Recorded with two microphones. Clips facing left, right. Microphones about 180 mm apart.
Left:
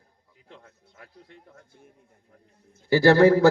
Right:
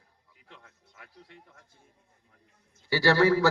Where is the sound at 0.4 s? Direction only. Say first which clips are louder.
Left 5 dB; 40° left (ahead or behind).